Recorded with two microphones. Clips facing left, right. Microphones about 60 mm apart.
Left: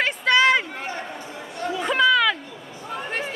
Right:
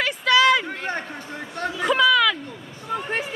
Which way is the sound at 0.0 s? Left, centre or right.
Left.